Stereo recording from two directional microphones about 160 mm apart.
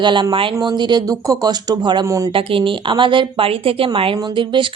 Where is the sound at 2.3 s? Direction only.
35° right (ahead or behind).